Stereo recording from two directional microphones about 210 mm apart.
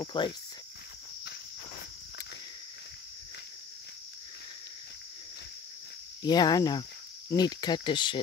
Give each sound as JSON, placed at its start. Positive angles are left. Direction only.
{"t": 0.0, "sound": "speech", "side_deg": 20}
{"t": 6.2, "sound": "speech", "side_deg": 20}